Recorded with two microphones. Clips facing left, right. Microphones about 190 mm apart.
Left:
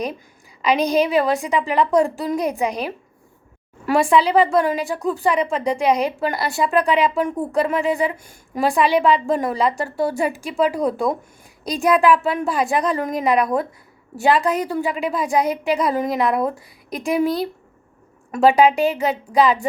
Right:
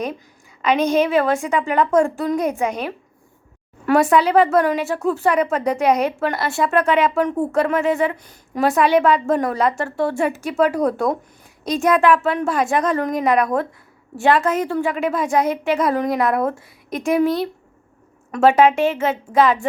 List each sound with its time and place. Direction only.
0.8 s speech: 35° left (ahead or behind)
3.8 s a woman's voice: centre (ahead or behind)
5.7 s speech: 10° left (ahead or behind)
6.3 s a woman's voice: centre (ahead or behind)
8.6 s a woman's voice: centre (ahead or behind)
18.3 s a woman's voice: centre (ahead or behind)